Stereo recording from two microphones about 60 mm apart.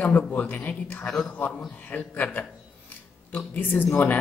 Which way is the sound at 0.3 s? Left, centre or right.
Left.